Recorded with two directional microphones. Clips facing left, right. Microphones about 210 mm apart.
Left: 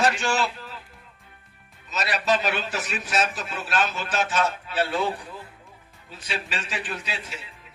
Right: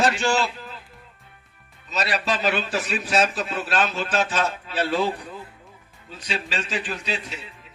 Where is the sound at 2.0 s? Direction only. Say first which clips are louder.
Even; 25° right (ahead or behind).